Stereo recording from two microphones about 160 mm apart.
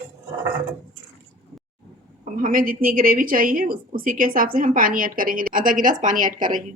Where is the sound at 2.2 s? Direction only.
60° right (ahead or behind).